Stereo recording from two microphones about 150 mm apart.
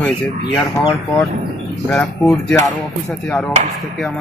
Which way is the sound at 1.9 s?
10° left (ahead or behind).